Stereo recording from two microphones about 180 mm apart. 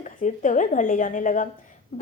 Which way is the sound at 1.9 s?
45° left (ahead or behind).